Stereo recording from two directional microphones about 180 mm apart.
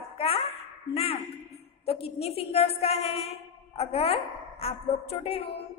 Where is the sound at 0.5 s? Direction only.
35° left (ahead or behind).